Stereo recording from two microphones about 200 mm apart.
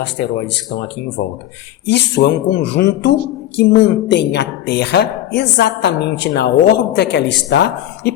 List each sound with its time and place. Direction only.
0.0 s a woman's voice: 60° left (ahead or behind)
1.9 s a woman's voice: 60° left (ahead or behind)